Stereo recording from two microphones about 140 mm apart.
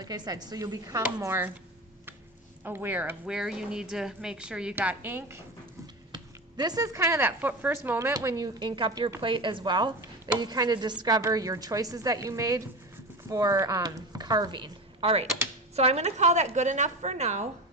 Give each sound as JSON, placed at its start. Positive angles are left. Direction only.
{"t": 0.0, "sound": "speech", "side_deg": -30}
{"t": 2.6, "sound": "speech", "side_deg": -15}
{"t": 6.1, "sound": "a woman's voice", "side_deg": -30}